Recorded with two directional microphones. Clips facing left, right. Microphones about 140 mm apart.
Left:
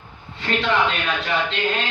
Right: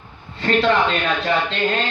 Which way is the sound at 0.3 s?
40° right (ahead or behind).